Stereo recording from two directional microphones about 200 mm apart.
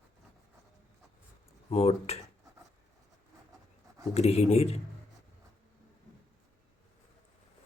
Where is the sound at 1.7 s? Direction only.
30° left (ahead or behind).